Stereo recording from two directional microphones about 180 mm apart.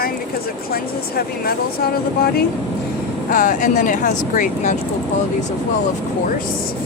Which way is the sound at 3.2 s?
45° left (ahead or behind).